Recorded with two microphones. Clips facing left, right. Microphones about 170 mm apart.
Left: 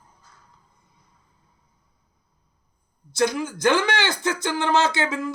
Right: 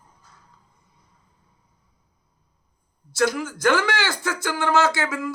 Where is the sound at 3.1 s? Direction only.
15° left (ahead or behind).